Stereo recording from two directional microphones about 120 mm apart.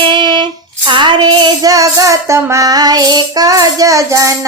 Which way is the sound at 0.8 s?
40° right (ahead or behind).